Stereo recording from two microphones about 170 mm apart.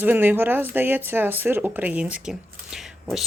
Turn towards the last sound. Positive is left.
turn(degrees=0)  # may be behind; listen again after turning